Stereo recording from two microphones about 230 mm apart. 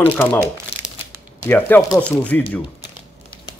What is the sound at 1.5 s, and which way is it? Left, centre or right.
Speech, centre.